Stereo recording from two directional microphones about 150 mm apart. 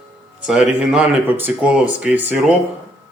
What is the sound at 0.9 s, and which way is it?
Speech, 10° right (ahead or behind).